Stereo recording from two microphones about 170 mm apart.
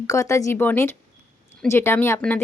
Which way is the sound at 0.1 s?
20° left (ahead or behind).